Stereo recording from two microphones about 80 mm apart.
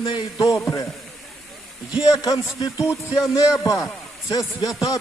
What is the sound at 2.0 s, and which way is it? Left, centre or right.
A man's voice, left.